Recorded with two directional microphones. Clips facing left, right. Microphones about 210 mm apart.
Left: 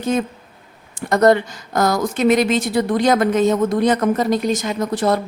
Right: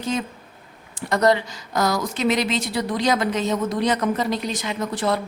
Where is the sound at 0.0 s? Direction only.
50° left (ahead or behind).